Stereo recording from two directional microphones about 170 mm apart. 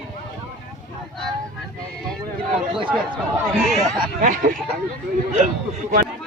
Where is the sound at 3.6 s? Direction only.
Centre (ahead or behind).